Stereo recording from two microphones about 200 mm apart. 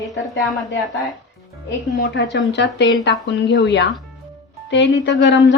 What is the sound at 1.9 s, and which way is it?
A woman's voice, 60° left (ahead or behind).